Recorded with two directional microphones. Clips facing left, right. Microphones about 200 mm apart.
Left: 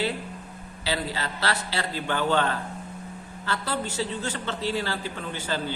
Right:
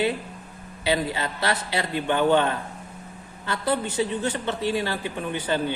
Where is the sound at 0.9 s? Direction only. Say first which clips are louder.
Right 5 dB; 20° right (ahead or behind).